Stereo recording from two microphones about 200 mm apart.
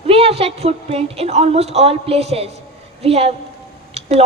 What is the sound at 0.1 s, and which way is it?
A man's voice, 30° right (ahead or behind).